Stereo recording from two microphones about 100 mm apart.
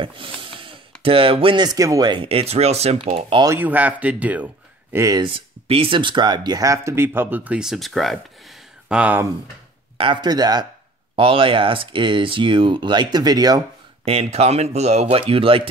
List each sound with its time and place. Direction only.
0.0 s snort: 60° right (ahead or behind)
1.0 s speech: 65° right (ahead or behind)
1.7 s speech: 40° right (ahead or behind)
2.0 s speech: 65° right (ahead or behind)
3.5 s speech: 15° right (ahead or behind)
4.9 s speech: 35° right (ahead or behind)
5.2 s speech: 65° right (ahead or behind); by 8.5 s centre (ahead or behind)
8.8 s speech: 10° right (ahead or behind)
9.9 s speech: 65° right (ahead or behind)
10.2 s speech: 45° right (ahead or behind)
11.1 s speech: 65° right (ahead or behind); by 13.6 s 40° right (ahead or behind)
14.0 s speech: 85° right; by 15.7 s 65° right (ahead or behind)